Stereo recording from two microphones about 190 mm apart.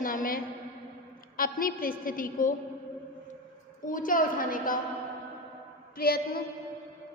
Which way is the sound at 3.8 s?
45° left (ahead or behind).